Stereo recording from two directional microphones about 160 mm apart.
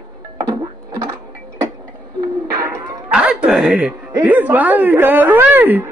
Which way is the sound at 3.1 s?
5° right (ahead or behind).